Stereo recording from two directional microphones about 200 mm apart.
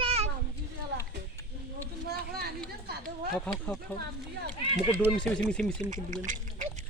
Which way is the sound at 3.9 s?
10° left (ahead or behind).